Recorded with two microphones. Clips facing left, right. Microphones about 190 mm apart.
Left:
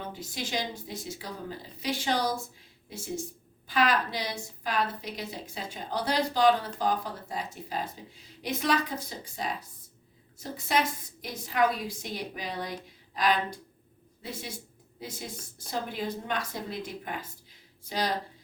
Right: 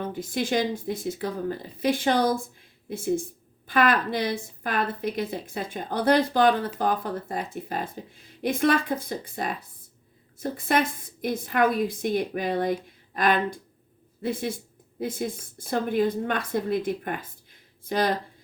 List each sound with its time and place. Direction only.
0.1 s speech: 50° right (ahead or behind)